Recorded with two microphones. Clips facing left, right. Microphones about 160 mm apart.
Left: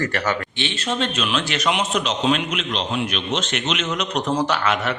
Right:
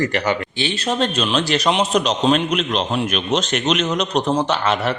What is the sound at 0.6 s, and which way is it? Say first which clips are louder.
A man's voice: right 4 dB; 35° right (ahead or behind).